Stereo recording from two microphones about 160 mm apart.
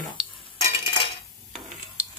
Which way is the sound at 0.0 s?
30° left (ahead or behind).